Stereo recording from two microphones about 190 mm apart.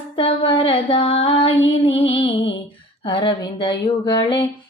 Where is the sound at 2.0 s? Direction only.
25° left (ahead or behind).